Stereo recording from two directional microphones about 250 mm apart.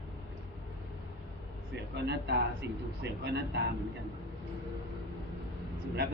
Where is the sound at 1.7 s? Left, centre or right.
Right.